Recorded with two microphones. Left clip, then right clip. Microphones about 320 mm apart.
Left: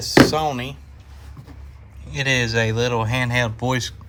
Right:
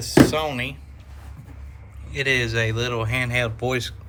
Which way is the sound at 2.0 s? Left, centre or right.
Centre.